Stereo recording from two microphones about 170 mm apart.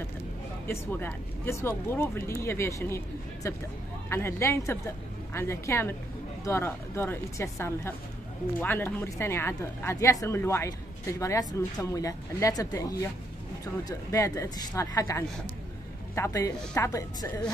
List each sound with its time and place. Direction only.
0.7 s a woman's voice: 10° left (ahead or behind)
13.8 s a woman's voice: 20° left (ahead or behind)